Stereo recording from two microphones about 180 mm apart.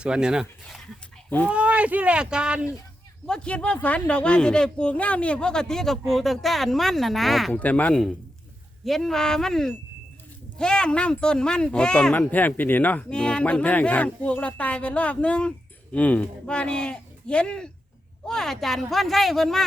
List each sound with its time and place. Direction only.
0.0 s speech: 5° right (ahead or behind)
3.2 s speech: 5° left (ahead or behind)